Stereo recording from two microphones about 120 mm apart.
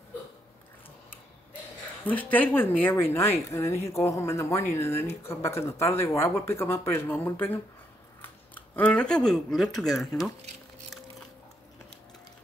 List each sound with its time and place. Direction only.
2.3 s speech: 15° left (ahead or behind)